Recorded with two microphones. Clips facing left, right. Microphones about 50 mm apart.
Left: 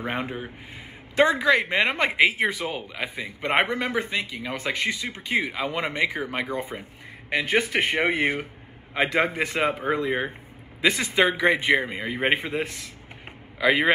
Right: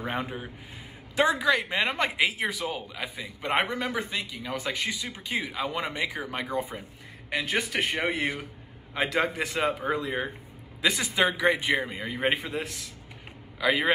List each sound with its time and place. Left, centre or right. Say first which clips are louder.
0.0 s a man's voice: left 3 dB; left
5.4 s speech: left 3 dB; left